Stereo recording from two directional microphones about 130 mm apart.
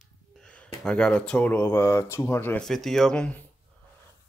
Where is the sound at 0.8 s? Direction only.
5° left (ahead or behind).